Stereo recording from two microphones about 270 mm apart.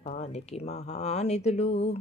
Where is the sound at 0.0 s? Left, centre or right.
Left.